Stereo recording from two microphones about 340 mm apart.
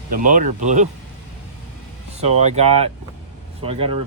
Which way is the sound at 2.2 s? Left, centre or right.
Centre.